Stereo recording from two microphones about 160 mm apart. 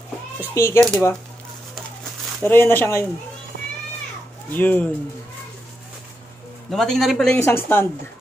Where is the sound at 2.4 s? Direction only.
15° left (ahead or behind).